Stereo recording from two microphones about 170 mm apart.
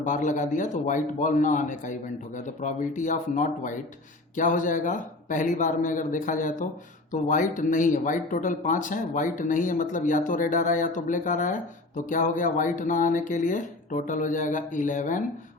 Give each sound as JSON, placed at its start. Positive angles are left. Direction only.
{"t": 0.0, "sound": "speech", "side_deg": 50}